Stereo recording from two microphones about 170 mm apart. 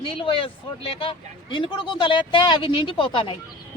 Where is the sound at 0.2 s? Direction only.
30° left (ahead or behind).